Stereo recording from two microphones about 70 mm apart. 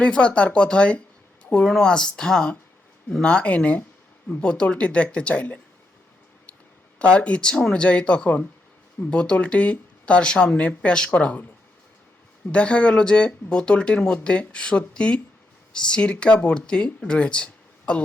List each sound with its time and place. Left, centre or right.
0.0 s speech: centre
7.0 s speech: centre
12.5 s speech: centre